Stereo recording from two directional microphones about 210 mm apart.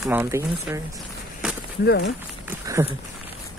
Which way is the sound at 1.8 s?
55° left (ahead or behind).